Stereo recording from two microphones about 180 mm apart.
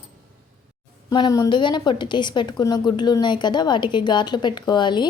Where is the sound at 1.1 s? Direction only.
25° left (ahead or behind).